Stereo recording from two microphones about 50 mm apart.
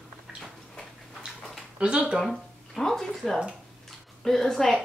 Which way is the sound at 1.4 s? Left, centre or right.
Centre.